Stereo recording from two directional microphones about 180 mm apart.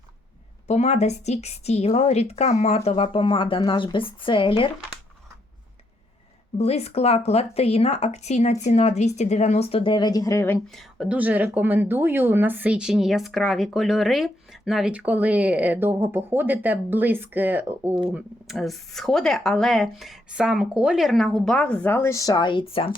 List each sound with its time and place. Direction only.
0.7 s a woman's voice: 35° left (ahead or behind)
6.6 s a woman's voice: 35° left (ahead or behind); by 10.6 s 15° left (ahead or behind)
10.8 s a woman's voice: centre (ahead or behind); by 22.9 s 30° left (ahead or behind)